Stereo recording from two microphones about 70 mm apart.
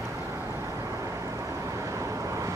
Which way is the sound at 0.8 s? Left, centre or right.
Right.